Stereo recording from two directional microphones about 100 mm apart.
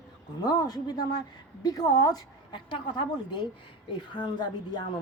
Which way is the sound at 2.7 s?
55° left (ahead or behind).